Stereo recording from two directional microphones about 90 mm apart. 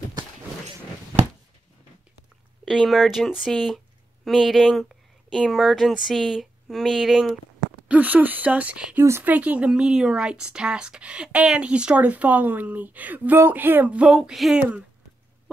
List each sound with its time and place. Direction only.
2.6 s speech: 5° right (ahead or behind)
7.9 s a woman's voice: 20° right (ahead or behind)